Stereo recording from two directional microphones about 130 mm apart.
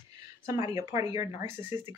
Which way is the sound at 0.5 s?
25° right (ahead or behind).